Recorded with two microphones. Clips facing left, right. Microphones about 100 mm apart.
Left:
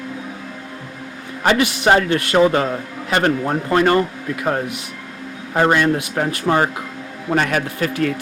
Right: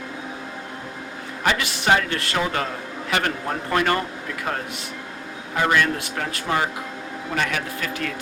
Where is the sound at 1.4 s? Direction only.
35° left (ahead or behind).